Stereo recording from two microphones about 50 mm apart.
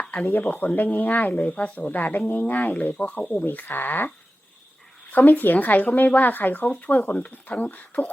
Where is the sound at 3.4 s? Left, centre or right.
Left.